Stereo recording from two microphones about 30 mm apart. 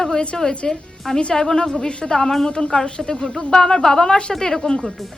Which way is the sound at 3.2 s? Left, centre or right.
Centre.